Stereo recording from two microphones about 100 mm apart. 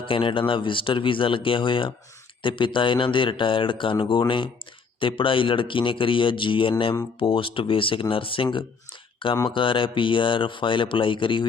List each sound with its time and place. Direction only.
0.0 s speech: 60° left (ahead or behind)
9.5 s speech: 60° left (ahead or behind)